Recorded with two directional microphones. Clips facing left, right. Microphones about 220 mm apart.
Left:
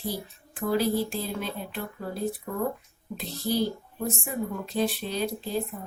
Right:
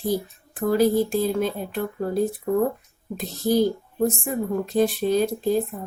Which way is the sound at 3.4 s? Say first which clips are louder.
Right 7 dB; 45° right (ahead or behind).